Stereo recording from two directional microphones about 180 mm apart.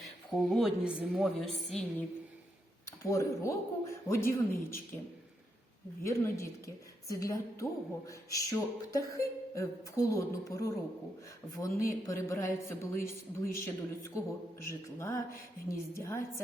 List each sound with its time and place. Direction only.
0.3 s a woman's voice: centre (ahead or behind)
2.8 s a man's voice: 15° left (ahead or behind)
6.0 s a man's voice: 15° left (ahead or behind)